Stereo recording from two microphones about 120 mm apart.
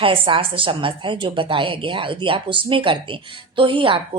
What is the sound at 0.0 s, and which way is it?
A woman's voice, 45° right (ahead or behind).